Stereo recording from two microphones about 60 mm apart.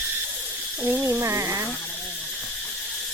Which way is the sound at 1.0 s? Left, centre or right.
Right.